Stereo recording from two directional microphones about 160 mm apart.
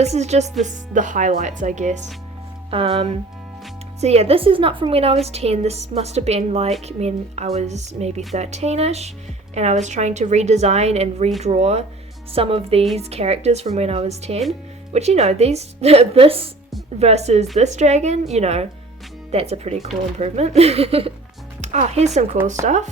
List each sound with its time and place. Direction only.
0.0 s a woman's voice: 45° right (ahead or behind)
2.6 s a woman's voice: 35° right (ahead or behind)